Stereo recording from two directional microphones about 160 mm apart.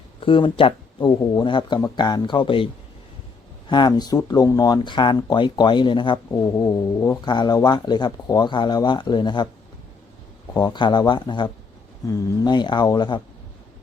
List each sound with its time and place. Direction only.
0.2 s speech: 30° left (ahead or behind)
3.7 s speech: 30° left (ahead or behind)
10.5 s speech: 25° left (ahead or behind)